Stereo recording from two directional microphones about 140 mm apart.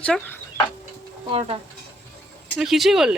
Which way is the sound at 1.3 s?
45° right (ahead or behind).